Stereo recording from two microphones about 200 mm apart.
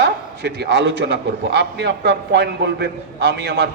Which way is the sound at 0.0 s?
55° right (ahead or behind).